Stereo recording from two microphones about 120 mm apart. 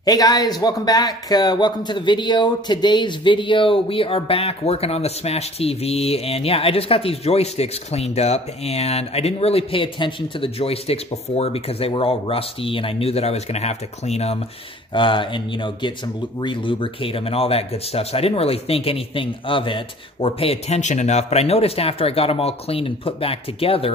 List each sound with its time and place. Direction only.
0.0 s a man's voice: 30° left (ahead or behind); by 14.4 s 60° left (ahead or behind)
15.0 s a man's voice: 45° left (ahead or behind)